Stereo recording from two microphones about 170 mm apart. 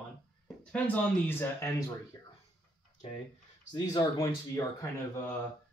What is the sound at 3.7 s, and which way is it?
Speech, 20° left (ahead or behind).